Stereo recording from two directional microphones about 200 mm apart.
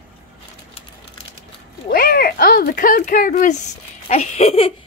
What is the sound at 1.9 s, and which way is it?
Speech, 45° left (ahead or behind).